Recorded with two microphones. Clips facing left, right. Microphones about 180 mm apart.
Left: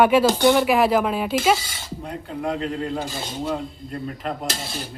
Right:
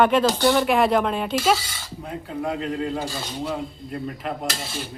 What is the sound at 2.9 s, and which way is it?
Speech, 15° left (ahead or behind).